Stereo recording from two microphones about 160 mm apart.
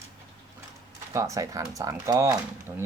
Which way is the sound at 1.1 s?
20° right (ahead or behind).